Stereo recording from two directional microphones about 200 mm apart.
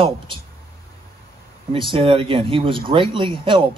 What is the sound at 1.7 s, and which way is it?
Speech, 25° right (ahead or behind).